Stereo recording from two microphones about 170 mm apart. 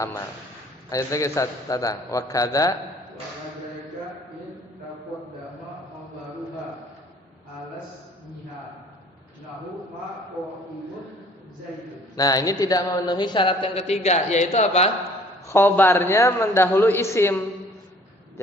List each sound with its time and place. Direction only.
0.9 s a man's voice: 20° left (ahead or behind)
12.1 s a man's voice: 20° left (ahead or behind); by 14.8 s 40° left (ahead or behind)
15.4 s a man's voice: 10° left (ahead or behind)